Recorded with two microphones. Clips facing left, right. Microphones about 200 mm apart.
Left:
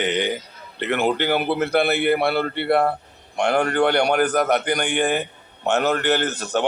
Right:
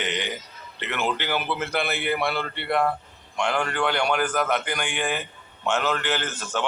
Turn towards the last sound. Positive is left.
turn(degrees=40)  # may be behind; listen again after turning